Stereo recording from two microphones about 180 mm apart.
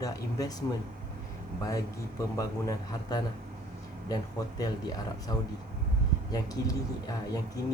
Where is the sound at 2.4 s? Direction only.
20° left (ahead or behind).